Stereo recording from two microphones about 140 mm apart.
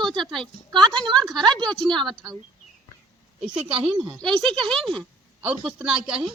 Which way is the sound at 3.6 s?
45° right (ahead or behind).